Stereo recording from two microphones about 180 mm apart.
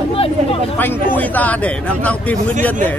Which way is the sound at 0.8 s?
10° left (ahead or behind).